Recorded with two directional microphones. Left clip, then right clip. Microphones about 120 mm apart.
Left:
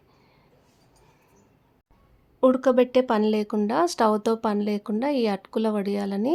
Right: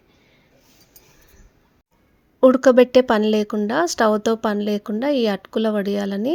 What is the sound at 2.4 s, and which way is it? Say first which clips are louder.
Speech: right 7 dB; 30° right (ahead or behind).